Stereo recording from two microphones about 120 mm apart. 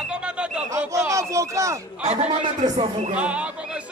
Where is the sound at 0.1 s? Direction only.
10° right (ahead or behind).